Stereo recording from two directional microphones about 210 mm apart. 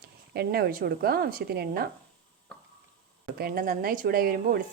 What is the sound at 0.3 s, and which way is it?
Speech, 45° right (ahead or behind).